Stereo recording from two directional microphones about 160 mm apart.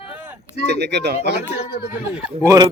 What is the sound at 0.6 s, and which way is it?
Speech, 90° right.